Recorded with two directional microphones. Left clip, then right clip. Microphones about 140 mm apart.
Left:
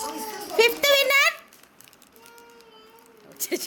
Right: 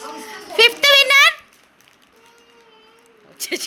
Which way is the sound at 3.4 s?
15° left (ahead or behind).